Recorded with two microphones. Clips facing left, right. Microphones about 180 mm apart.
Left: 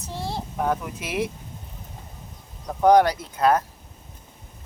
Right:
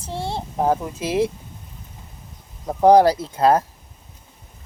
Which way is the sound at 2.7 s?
30° right (ahead or behind).